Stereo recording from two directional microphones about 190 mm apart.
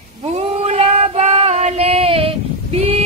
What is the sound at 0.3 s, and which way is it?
Female singing, 35° right (ahead or behind).